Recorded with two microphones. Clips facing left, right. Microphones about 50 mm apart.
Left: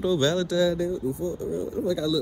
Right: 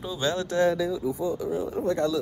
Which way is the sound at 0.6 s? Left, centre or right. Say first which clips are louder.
Right 2 dB; right.